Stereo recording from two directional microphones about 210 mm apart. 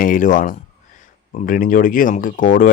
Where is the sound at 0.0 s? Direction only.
40° left (ahead or behind).